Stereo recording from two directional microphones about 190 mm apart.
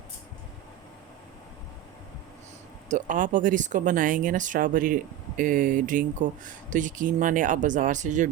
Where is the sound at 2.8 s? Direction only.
40° right (ahead or behind).